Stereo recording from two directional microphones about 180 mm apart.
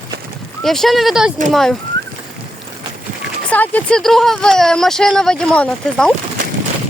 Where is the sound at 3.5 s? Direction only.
10° left (ahead or behind).